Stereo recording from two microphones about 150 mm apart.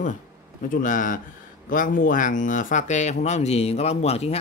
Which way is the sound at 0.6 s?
65° left (ahead or behind).